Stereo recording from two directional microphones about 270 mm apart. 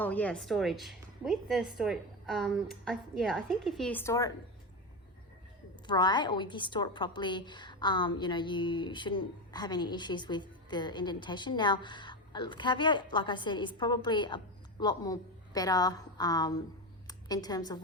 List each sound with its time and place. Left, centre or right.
0.0 s a woman's voice: centre
5.9 s a woman's voice: centre